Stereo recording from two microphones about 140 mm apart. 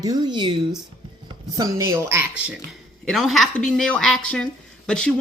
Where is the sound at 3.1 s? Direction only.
Centre (ahead or behind).